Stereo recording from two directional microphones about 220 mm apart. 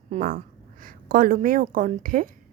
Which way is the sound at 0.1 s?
35° right (ahead or behind).